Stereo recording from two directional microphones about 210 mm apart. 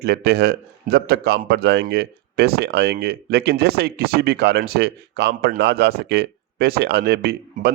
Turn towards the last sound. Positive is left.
turn(degrees=-50)  # may be behind; listen again after turning